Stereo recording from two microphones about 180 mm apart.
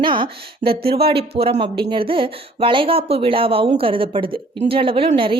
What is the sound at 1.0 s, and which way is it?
Speech, 30° right (ahead or behind).